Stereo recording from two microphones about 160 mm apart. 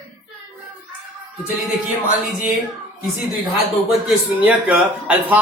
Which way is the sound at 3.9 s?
5° right (ahead or behind).